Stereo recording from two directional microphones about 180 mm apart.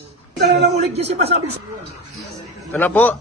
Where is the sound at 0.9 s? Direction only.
35° right (ahead or behind).